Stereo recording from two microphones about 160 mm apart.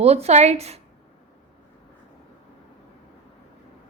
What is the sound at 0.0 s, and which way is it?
Speech, 40° right (ahead or behind).